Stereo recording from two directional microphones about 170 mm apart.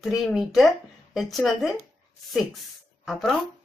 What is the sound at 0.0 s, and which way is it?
Speech, 5° right (ahead or behind).